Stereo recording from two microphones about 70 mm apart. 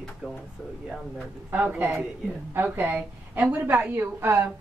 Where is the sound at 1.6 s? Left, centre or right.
Right.